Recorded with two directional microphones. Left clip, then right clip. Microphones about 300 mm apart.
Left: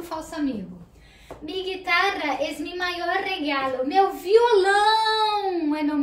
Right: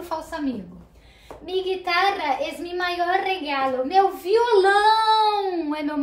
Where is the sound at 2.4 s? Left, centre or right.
Centre.